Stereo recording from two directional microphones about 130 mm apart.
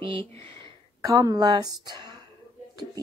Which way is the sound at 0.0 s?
45° right (ahead or behind).